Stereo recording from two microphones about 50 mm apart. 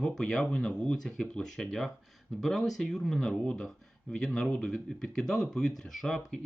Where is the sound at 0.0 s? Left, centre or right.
Centre.